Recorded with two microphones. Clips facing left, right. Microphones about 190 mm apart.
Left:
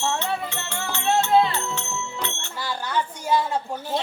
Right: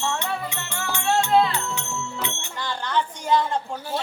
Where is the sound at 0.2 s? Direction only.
15° right (ahead or behind).